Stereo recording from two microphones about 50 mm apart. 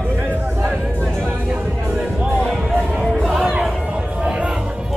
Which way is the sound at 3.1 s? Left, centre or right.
Centre.